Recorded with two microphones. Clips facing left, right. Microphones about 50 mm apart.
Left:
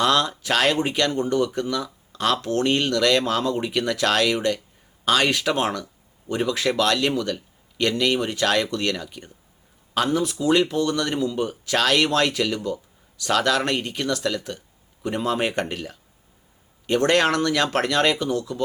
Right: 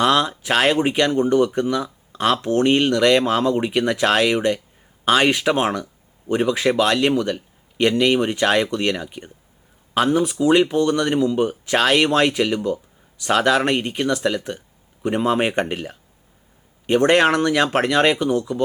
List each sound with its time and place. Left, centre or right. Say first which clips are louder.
0.0 s speech: right 3 dB; centre